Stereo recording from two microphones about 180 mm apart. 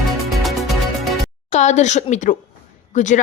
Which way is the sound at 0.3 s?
Centre (ahead or behind).